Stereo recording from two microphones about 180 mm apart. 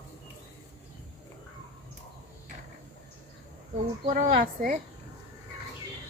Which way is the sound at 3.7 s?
45° right (ahead or behind).